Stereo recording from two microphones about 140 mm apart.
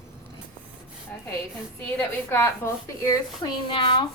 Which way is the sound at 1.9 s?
15° left (ahead or behind).